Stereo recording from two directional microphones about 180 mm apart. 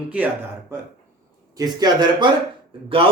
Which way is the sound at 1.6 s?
20° right (ahead or behind).